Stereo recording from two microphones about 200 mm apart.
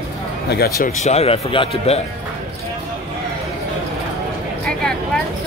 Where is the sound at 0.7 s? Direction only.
40° left (ahead or behind).